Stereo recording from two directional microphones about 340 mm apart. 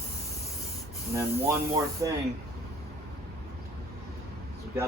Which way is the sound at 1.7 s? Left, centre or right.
Centre.